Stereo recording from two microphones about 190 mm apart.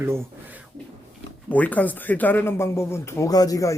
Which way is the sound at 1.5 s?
10° left (ahead or behind).